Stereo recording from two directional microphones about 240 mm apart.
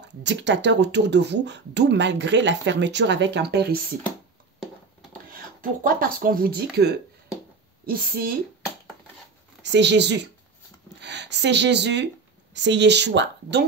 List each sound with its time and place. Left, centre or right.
0.0 s speech: right
5.3 s a woman's voice: right
9.6 s speech: right